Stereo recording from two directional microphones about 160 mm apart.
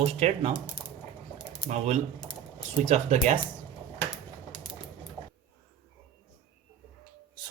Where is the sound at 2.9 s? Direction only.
45° right (ahead or behind).